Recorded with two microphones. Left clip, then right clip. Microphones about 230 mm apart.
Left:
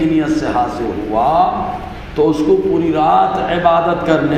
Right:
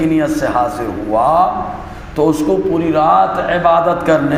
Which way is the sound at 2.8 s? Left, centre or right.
Right.